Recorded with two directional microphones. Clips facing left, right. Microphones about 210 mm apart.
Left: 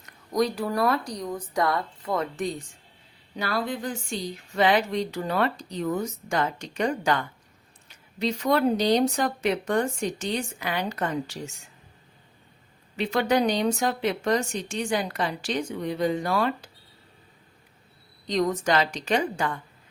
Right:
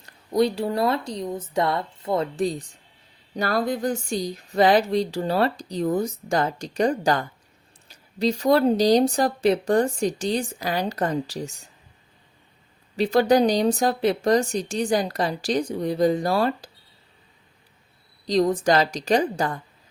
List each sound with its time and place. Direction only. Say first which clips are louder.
0.0 s speech: right 4 dB; 30° right (ahead or behind)
13.0 s speech: right 5 dB; 35° right (ahead or behind)
18.3 s speech: right 4 dB; 35° right (ahead or behind)